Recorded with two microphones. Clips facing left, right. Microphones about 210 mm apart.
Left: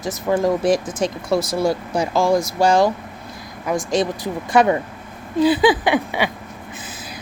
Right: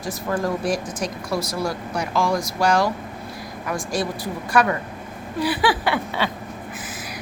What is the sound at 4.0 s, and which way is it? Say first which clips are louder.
Speech: left 4 dB; 20° left (ahead or behind).